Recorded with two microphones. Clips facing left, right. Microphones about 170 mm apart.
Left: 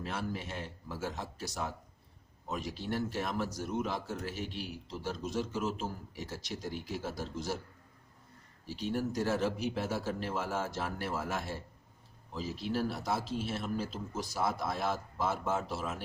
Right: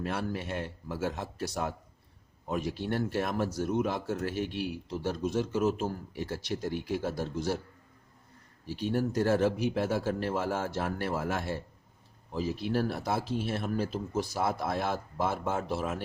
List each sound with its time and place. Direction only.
0.0 s a man's voice: 60° right (ahead or behind)
8.6 s a man's voice: 55° right (ahead or behind)